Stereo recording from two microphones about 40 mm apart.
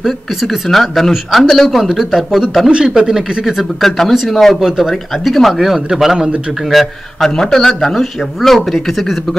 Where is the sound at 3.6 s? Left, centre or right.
Centre.